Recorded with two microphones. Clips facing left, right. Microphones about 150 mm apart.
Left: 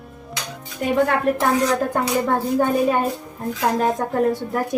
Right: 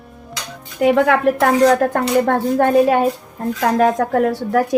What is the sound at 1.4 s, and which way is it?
A woman's voice, 75° right (ahead or behind).